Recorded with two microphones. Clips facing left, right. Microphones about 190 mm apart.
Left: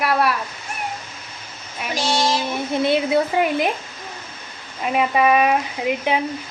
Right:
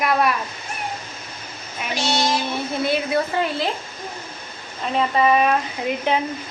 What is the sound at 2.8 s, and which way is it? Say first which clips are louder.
Speech: left 4 dB; 20° left (ahead or behind).